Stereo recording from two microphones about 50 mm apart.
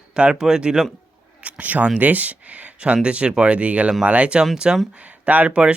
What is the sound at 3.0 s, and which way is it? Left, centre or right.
Speech, right.